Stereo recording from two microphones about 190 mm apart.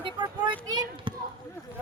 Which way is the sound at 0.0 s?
25° right (ahead or behind).